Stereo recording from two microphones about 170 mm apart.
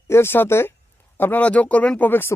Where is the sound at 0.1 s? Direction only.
15° left (ahead or behind).